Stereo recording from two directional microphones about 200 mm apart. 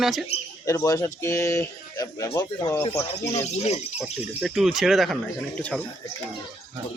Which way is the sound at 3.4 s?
35° left (ahead or behind).